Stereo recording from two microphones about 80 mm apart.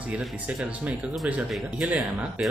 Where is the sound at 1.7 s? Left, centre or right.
Centre.